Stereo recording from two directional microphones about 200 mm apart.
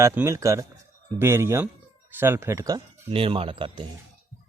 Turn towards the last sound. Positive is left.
turn(degrees=-25)  # may be behind; listen again after turning